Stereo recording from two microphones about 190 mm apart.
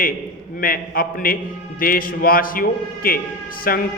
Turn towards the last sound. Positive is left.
turn(degrees=50)  # may be behind; listen again after turning